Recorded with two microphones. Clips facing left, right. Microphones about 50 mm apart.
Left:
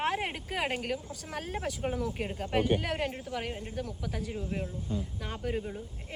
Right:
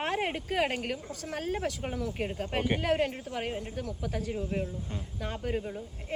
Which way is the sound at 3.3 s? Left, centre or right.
Centre.